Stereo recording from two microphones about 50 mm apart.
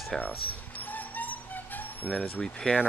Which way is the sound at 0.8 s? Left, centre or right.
Left.